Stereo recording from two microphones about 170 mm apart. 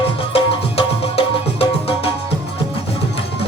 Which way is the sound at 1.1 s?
35° left (ahead or behind).